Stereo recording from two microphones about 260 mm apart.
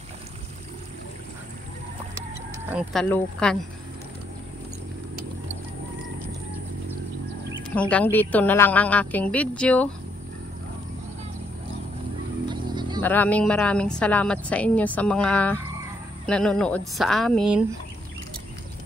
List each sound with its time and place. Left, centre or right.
2.7 s a woman's voice: centre
7.9 s a woman's voice: centre
12.4 s a sound: centre
13.0 s a woman's voice: centre